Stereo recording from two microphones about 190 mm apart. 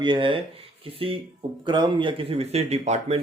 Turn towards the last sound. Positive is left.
turn(degrees=-35)  # may be behind; listen again after turning